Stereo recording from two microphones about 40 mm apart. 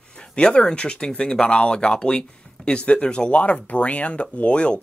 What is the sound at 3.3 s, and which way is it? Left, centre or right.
Speech, left.